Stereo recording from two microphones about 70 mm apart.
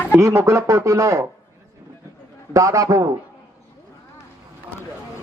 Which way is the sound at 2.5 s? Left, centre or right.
Right.